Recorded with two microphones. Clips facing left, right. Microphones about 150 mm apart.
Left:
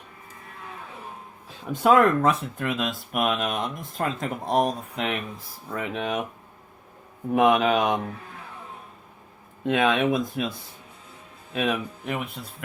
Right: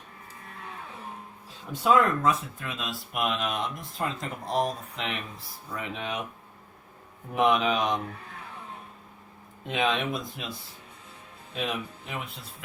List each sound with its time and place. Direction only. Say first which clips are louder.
1.7 s speech: left 4 dB; 60° left (ahead or behind)
5.7 s speech: left 6 dB; 50° left (ahead or behind)
7.3 s speech: left 4 dB; 55° left (ahead or behind)
9.6 s speech: left 6 dB; 50° left (ahead or behind)
11.5 s speech: left 6 dB; 60° left (ahead or behind)